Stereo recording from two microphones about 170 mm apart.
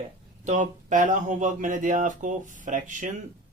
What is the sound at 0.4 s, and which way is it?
Speech, 45° right (ahead or behind).